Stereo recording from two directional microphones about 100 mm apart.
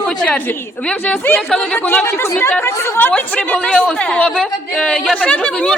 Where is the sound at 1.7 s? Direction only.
15° left (ahead or behind).